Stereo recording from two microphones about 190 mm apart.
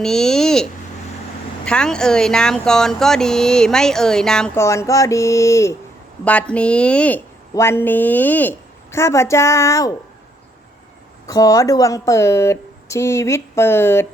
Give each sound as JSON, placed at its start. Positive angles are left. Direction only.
{"t": 0.0, "sound": "speech", "side_deg": 5}
{"t": 4.6, "sound": "speech", "side_deg": 15}
{"t": 11.3, "sound": "speech", "side_deg": 20}